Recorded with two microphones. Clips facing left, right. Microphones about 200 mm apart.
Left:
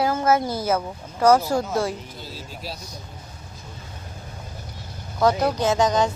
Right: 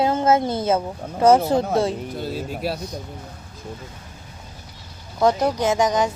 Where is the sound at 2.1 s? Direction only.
55° right (ahead or behind).